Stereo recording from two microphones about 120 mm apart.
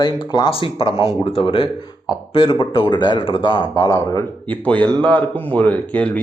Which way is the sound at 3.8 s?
25° left (ahead or behind).